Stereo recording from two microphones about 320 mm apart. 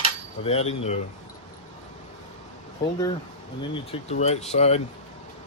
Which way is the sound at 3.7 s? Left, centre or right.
Centre.